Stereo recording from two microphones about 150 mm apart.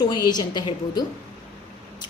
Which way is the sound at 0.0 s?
25° left (ahead or behind).